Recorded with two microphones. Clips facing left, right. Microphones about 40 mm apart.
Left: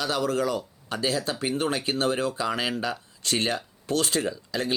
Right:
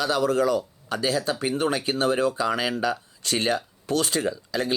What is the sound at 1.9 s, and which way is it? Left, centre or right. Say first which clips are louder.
Speech: right 2 dB; right.